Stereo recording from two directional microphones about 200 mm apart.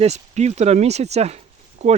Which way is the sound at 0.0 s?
35° right (ahead or behind).